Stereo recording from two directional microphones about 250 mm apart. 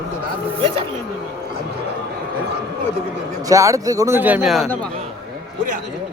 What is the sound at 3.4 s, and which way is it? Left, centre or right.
A man's voice, centre.